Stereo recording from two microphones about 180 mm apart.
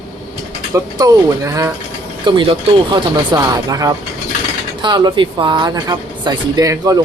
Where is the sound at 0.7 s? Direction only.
20° right (ahead or behind).